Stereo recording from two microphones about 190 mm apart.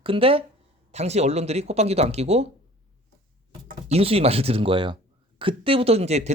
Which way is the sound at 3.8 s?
30° right (ahead or behind).